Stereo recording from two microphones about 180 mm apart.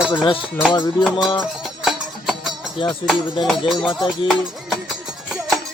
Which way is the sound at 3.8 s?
Centre (ahead or behind).